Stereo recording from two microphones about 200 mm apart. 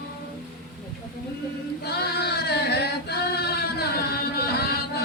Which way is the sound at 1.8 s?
55° left (ahead or behind).